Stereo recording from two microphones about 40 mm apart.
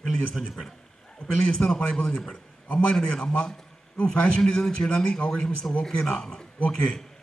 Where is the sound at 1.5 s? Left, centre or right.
Left.